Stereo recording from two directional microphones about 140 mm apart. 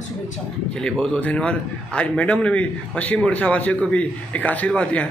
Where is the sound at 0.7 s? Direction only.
5° left (ahead or behind).